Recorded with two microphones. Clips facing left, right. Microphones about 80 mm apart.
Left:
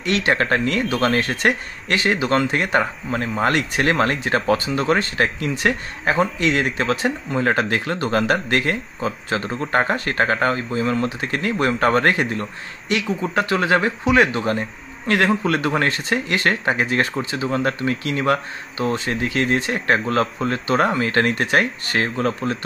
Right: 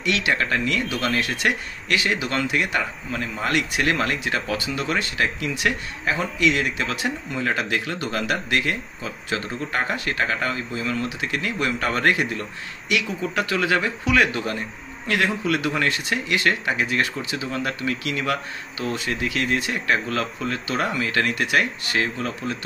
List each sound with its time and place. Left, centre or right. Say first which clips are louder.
0.0 s speech: left 3 dB; left
15.0 s speech: left 4 dB; left